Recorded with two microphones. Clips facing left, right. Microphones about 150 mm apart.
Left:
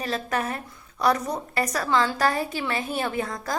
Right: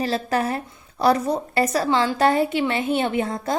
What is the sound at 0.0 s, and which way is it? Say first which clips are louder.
Speech: right 5 dB; 30° right (ahead or behind).